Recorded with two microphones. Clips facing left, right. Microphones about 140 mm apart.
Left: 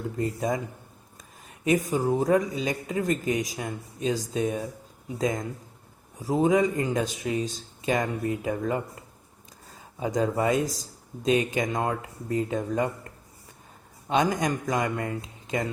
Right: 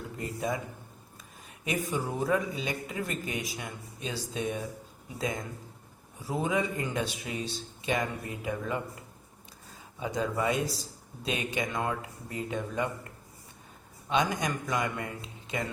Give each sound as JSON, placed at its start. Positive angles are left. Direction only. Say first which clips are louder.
{"t": 0.2, "sound": "speech", "louder": "left 5 dB", "side_deg": 40}
{"t": 1.6, "sound": "a man's voice", "louder": "left 8 dB", "side_deg": 40}
{"t": 10.0, "sound": "speech", "louder": "left 5 dB", "side_deg": 40}
{"t": 14.1, "sound": "a man's voice", "louder": "left 4 dB", "side_deg": 45}